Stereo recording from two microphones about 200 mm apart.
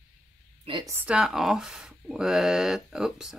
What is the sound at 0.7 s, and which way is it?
Speech, 25° right (ahead or behind).